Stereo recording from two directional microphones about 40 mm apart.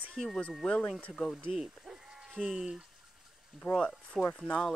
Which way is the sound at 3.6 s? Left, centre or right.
Centre.